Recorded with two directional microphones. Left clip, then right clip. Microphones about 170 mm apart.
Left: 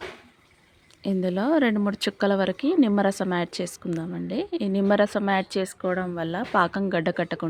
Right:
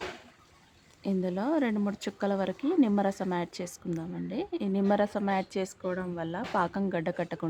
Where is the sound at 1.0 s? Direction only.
20° left (ahead or behind).